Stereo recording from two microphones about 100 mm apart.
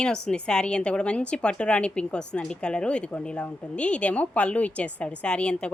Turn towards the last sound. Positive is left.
turn(degrees=10)  # may be behind; listen again after turning